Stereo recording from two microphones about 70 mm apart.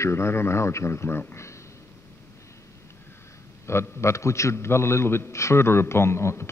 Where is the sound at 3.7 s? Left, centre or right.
Left.